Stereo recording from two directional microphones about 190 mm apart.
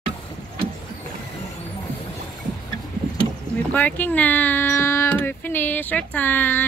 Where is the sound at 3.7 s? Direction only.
10° left (ahead or behind).